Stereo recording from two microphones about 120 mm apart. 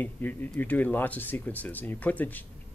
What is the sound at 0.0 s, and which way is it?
Speech, 15° left (ahead or behind).